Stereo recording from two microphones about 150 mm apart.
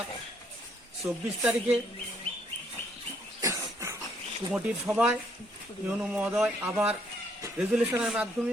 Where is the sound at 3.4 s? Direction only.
20° right (ahead or behind).